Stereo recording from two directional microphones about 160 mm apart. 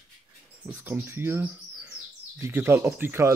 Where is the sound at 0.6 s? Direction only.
10° right (ahead or behind).